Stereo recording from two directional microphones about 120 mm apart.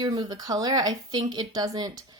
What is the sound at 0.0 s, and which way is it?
Speech, 30° right (ahead or behind).